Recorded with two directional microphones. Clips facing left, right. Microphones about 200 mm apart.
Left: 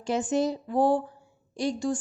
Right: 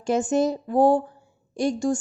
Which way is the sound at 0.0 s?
45° right (ahead or behind).